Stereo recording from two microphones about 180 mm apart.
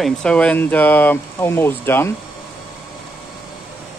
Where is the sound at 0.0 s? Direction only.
5° left (ahead or behind).